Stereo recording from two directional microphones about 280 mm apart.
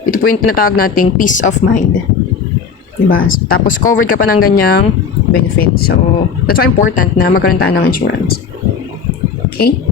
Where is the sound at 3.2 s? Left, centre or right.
Left.